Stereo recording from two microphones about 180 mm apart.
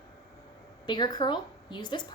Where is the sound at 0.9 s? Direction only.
25° left (ahead or behind).